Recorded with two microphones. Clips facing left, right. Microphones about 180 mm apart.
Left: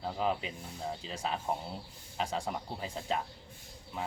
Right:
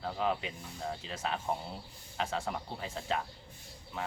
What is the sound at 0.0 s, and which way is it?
Speech, 5° left (ahead or behind).